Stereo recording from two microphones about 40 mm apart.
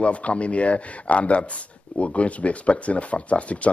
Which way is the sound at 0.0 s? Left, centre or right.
Left.